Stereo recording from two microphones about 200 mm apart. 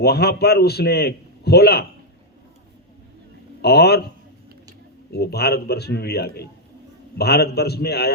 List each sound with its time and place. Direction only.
0.0 s a man's voice: 50° left (ahead or behind)
3.6 s a man's voice: 55° left (ahead or behind)
5.1 s a man's voice: 55° left (ahead or behind)